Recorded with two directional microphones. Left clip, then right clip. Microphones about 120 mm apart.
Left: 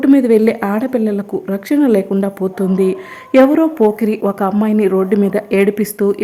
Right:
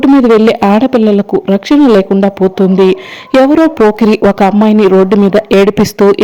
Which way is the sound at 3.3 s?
40° right (ahead or behind).